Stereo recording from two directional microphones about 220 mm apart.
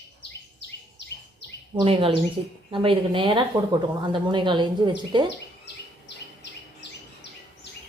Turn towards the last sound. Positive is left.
turn(degrees=50)  # may be behind; listen again after turning